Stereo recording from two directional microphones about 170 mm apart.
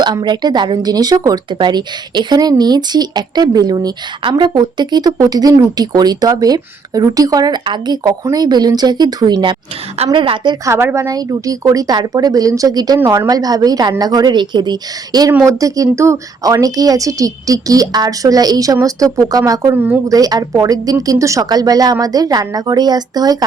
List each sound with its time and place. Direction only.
0.0 s speech: 25° right (ahead or behind)
10.8 s speech: 15° right (ahead or behind)